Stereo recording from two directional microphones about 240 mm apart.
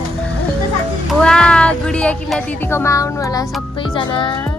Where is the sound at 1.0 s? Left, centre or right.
Centre.